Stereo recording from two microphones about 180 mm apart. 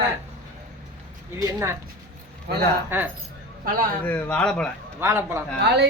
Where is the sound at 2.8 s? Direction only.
10° right (ahead or behind).